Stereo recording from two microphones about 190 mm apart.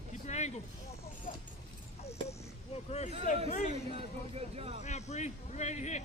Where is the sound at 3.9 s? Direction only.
30° right (ahead or behind).